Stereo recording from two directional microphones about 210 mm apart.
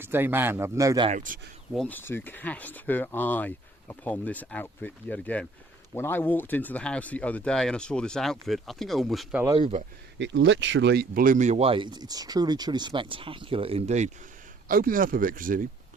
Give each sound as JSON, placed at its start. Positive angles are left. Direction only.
{"t": 0.0, "sound": "speech", "side_deg": -10}
{"t": 1.0, "sound": "speech", "side_deg": -35}
{"t": 1.7, "sound": "speech", "side_deg": 5}
{"t": 9.6, "sound": "speech", "side_deg": -25}
{"t": 10.2, "sound": "speech", "side_deg": -60}